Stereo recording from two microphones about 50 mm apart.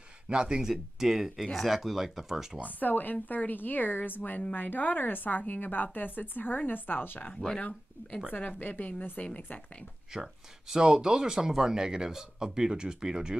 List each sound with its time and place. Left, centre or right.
0.3 s speech: centre
0.6 s speech: centre
2.7 s a woman's voice: left
7.3 s speech: centre
8.3 s a woman's voice: left
10.1 s speech: centre